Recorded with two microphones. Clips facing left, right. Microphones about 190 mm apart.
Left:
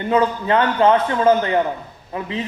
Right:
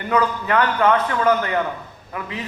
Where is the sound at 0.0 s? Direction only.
25° left (ahead or behind).